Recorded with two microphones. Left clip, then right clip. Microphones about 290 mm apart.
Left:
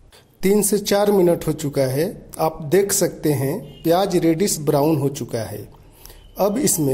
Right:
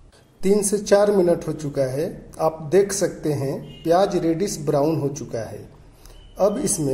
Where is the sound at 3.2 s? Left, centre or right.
Left.